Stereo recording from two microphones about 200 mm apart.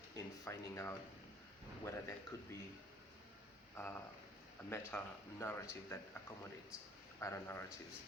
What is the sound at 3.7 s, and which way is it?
Speech, 10° left (ahead or behind).